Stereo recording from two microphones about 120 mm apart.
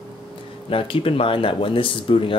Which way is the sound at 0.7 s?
50° left (ahead or behind).